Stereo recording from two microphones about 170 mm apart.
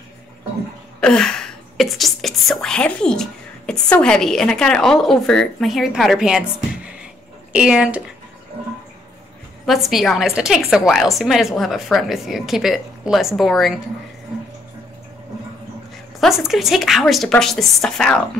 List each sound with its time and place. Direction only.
1.0 s a woman's voice: 5° left (ahead or behind)
7.5 s speech: 5° right (ahead or behind)
9.7 s a woman's voice: centre (ahead or behind)
16.2 s a woman's voice: centre (ahead or behind)